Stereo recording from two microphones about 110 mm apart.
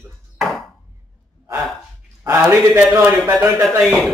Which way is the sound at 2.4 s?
25° right (ahead or behind).